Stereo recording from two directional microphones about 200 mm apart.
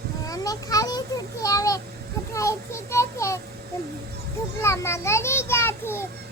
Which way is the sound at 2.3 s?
15° left (ahead or behind).